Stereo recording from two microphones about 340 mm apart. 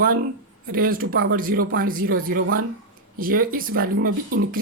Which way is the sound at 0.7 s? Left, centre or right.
Right.